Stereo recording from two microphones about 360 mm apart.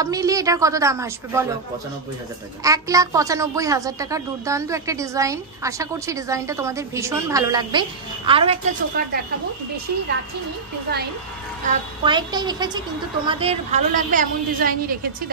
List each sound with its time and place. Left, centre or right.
0.0 s a woman's voice: centre
2.6 s a woman's voice: centre
11.6 s a woman's voice: centre